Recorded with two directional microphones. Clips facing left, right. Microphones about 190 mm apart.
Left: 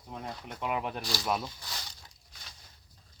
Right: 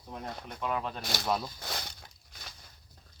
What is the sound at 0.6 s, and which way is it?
Speech, 15° left (ahead or behind).